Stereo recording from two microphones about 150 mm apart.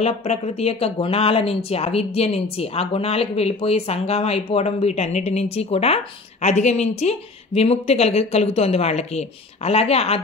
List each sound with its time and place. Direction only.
0.0 s speech: 45° left (ahead or behind)